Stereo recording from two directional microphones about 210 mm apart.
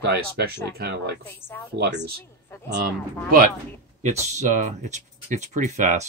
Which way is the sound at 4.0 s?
30° right (ahead or behind).